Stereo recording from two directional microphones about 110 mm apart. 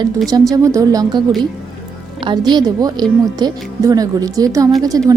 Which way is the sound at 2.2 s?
40° right (ahead or behind).